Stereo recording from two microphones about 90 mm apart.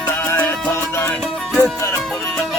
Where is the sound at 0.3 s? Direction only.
30° left (ahead or behind).